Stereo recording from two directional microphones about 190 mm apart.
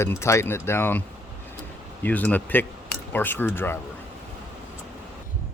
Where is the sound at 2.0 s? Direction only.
10° left (ahead or behind).